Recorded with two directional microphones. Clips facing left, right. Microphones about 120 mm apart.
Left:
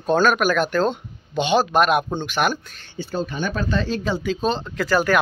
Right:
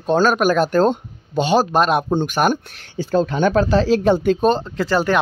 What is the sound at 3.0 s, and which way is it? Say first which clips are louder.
Speech: right 8 dB; 90° right.